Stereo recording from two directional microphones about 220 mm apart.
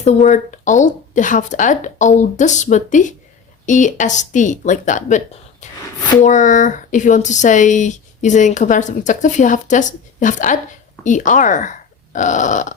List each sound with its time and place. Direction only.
0.0 s speech: 30° left (ahead or behind)